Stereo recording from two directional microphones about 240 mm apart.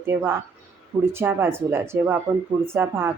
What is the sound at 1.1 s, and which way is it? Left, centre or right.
Speech, centre.